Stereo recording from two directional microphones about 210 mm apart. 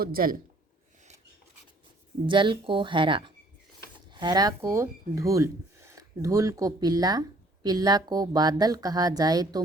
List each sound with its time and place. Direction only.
0.0 s speech: 45° right (ahead or behind)
2.2 s a woman's voice: 25° right (ahead or behind)